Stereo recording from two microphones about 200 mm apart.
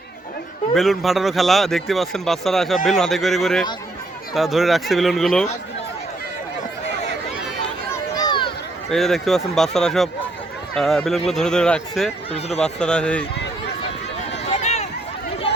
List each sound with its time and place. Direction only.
0.7 s speech: centre (ahead or behind)
8.1 s a sound: 20° left (ahead or behind)
8.9 s speech: centre (ahead or behind)
14.5 s run: 35° left (ahead or behind)